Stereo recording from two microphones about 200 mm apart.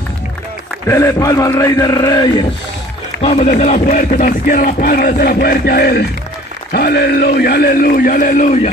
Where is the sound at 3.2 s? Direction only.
30° left (ahead or behind).